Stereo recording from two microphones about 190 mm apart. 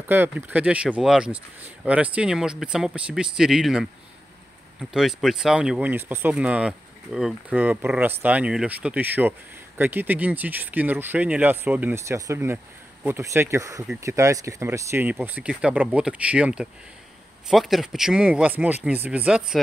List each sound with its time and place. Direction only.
0.0 s speech: 10° right (ahead or behind)